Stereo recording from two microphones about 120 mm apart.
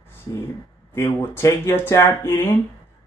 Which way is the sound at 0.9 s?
20° left (ahead or behind).